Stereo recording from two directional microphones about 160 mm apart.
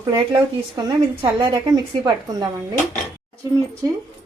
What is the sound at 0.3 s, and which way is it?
A woman's voice, 25° right (ahead or behind).